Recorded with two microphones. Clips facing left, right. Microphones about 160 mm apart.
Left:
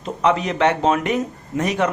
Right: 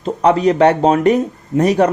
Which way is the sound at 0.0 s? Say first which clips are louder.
Right 6 dB; 35° right (ahead or behind).